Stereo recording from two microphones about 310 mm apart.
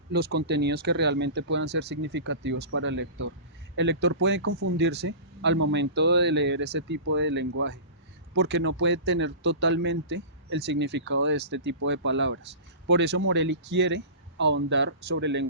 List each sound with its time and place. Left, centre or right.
0.1 s speech: right